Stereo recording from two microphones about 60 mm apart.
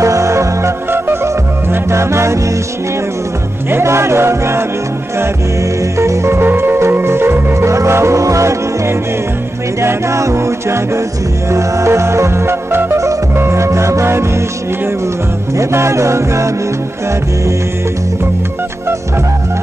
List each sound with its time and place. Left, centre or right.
0.0 s music: right
3.7 s music: right
5.9 s music: right
6.4 s music: right
7.6 s music: right
15.5 s music: right